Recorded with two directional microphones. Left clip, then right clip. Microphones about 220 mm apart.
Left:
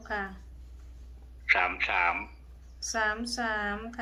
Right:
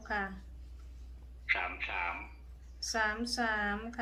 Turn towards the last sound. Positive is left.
turn(degrees=5)  # may be behind; listen again after turning